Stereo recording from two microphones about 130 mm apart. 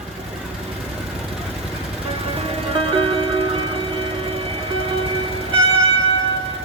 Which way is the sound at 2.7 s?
45° right (ahead or behind).